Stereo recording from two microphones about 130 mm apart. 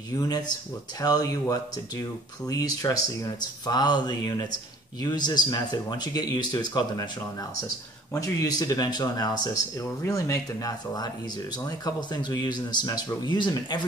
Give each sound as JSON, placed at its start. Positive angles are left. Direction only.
{"t": 0.1, "sound": "speech", "side_deg": 30}
{"t": 8.1, "sound": "speech", "side_deg": 25}